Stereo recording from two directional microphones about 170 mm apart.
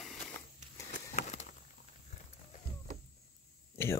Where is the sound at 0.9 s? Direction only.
45° left (ahead or behind).